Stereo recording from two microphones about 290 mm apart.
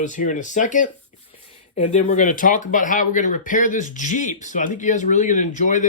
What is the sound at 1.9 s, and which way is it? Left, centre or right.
Speech, left.